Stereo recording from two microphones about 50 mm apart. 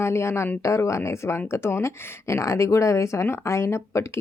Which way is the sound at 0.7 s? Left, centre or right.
Left.